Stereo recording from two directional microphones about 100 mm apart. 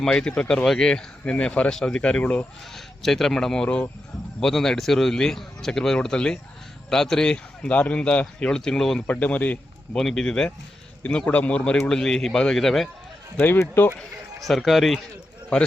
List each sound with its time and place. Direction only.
0.0 s speech: 5° left (ahead or behind)
2.7 s speech: centre (ahead or behind)
10.0 s speech: 5° left (ahead or behind)
13.3 s speech: 25° left (ahead or behind)
14.4 s speech: centre (ahead or behind)